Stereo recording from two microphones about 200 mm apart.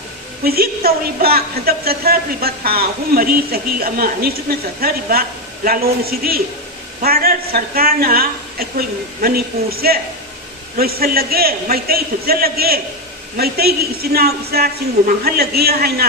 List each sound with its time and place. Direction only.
0.4 s a woman's voice: 50° right (ahead or behind)